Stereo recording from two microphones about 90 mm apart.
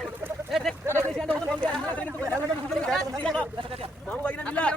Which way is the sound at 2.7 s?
5° left (ahead or behind).